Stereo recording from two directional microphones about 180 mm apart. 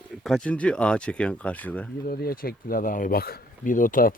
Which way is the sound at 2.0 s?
55° left (ahead or behind).